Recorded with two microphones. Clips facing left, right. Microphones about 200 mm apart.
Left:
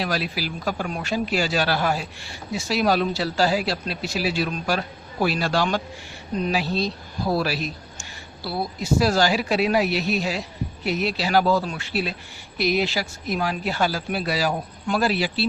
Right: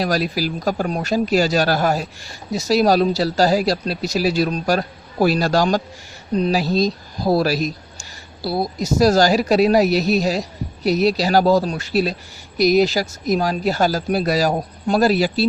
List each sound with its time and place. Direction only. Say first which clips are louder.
0.0 s a man's voice: right 6 dB; 40° right (ahead or behind)